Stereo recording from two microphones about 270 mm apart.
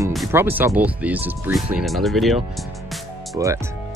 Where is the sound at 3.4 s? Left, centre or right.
Centre.